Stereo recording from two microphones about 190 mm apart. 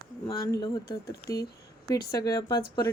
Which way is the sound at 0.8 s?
55° left (ahead or behind).